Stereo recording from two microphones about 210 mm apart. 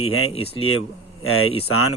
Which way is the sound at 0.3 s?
25° left (ahead or behind).